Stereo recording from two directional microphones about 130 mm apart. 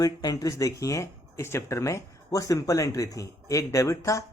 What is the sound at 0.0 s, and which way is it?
Speech, 30° left (ahead or behind).